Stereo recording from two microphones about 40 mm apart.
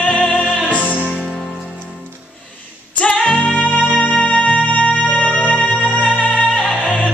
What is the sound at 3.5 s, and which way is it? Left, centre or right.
Music, left.